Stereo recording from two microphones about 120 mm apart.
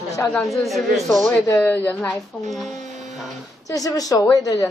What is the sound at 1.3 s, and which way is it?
Speech, 20° left (ahead or behind).